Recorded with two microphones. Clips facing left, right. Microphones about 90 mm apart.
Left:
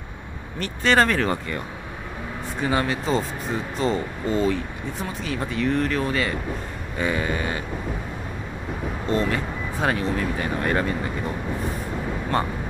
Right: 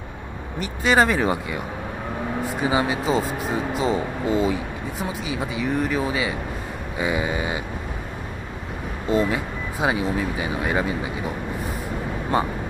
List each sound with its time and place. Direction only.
0.6 s speech: 10° right (ahead or behind)
2.6 s speech: 10° right (ahead or behind)
9.1 s speech: 10° right (ahead or behind)